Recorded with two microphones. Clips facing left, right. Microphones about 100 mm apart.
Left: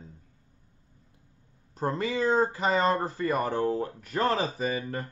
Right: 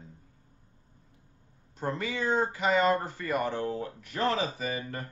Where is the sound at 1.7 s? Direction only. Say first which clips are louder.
Left 4 dB; 35° left (ahead or behind).